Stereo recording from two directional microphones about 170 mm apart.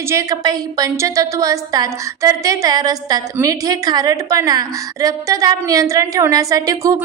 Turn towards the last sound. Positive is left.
turn(degrees=-20)  # may be behind; listen again after turning